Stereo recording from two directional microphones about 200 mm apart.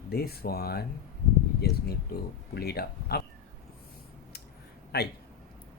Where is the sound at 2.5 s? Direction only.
50° left (ahead or behind).